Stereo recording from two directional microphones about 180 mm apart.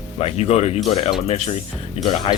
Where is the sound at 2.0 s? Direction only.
35° left (ahead or behind).